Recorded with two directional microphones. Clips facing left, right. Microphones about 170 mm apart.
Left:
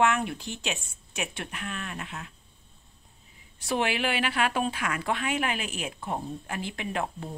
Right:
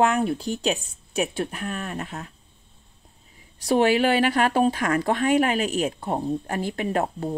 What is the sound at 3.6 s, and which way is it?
A woman's voice, 40° right (ahead or behind).